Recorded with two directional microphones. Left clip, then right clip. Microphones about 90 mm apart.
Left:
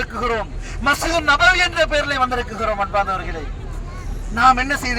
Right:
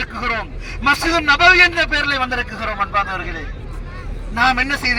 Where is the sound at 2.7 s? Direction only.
25° left (ahead or behind).